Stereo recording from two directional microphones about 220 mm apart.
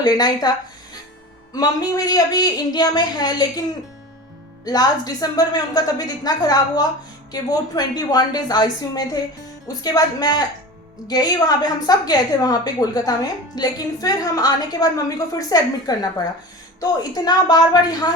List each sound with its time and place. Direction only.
0.0 s a woman's voice: 20° left (ahead or behind)
1.5 s a woman's voice: 15° left (ahead or behind)
4.6 s a woman's voice: 15° left (ahead or behind)